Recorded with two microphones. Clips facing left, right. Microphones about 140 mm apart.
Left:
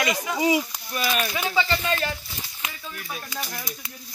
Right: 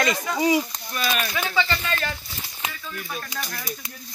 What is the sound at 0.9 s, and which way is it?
Speech, 20° left (ahead or behind).